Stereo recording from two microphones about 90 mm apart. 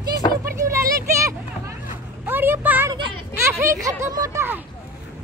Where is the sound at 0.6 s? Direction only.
35° right (ahead or behind).